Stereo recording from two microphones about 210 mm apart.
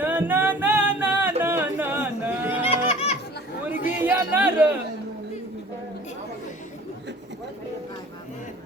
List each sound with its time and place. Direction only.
0.0 s music: 10° right (ahead or behind)
2.6 s music: 30° left (ahead or behind)
3.8 s a sound: 10° right (ahead or behind)